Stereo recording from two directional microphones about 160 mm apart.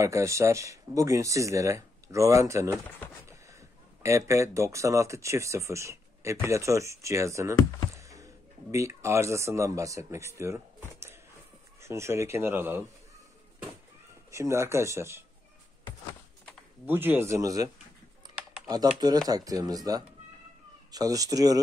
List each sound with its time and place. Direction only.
0.0 s speech: 20° right (ahead or behind)
4.0 s speech: 20° right (ahead or behind)
8.0 s a sound: 20° right (ahead or behind)
8.7 s speech: 20° right (ahead or behind)
11.8 s speech: 15° right (ahead or behind)
14.3 s speech: 20° right (ahead or behind)
16.8 s speech: 10° right (ahead or behind)
19.2 s speech: 20° right (ahead or behind)